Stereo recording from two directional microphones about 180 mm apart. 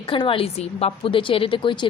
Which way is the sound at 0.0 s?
30° left (ahead or behind).